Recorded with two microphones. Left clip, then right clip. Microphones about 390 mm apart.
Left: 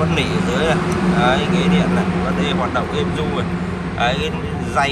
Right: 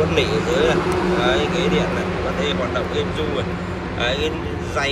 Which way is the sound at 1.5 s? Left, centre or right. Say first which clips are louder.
Left 1 dB; centre.